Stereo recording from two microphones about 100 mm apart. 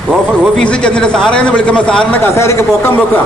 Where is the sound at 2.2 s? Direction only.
25° left (ahead or behind).